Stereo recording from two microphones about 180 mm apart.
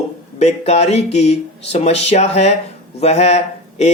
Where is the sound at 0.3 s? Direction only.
35° left (ahead or behind).